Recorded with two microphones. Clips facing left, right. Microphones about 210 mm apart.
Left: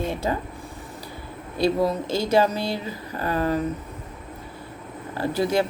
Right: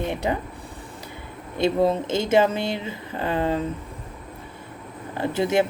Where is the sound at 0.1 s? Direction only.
20° right (ahead or behind).